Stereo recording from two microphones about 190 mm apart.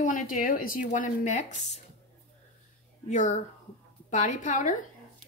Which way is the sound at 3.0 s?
40° left (ahead or behind).